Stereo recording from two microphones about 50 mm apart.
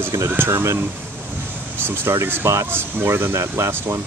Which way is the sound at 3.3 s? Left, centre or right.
Right.